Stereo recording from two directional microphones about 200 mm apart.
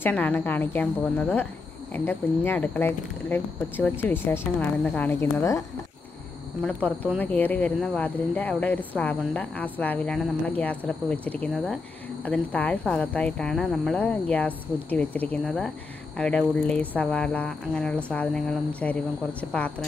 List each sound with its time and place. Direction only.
0.0 s speech: 10° left (ahead or behind)
6.6 s speech: 5° left (ahead or behind)